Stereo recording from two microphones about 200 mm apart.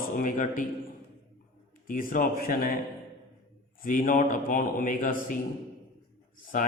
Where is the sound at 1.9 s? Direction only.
45° left (ahead or behind).